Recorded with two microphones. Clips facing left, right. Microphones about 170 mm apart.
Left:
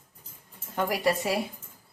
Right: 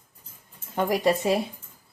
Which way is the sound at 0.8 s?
20° right (ahead or behind).